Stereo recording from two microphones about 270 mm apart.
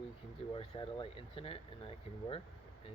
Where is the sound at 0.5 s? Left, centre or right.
Left.